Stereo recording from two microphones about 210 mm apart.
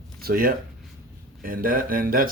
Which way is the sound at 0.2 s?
45° right (ahead or behind).